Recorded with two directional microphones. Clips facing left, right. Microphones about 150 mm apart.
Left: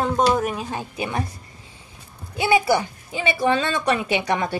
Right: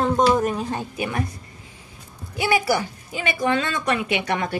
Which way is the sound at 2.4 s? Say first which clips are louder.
Left 2 dB; 25° left (ahead or behind).